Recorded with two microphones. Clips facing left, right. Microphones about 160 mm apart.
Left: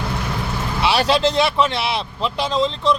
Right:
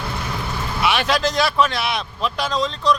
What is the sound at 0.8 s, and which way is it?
Speech, 30° left (ahead or behind).